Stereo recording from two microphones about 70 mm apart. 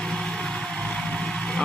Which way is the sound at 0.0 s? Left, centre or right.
Centre.